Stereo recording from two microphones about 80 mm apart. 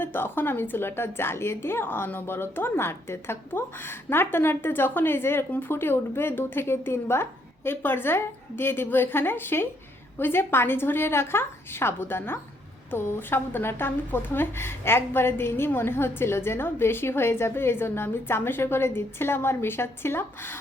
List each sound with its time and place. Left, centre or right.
0.0 s a woman's voice: left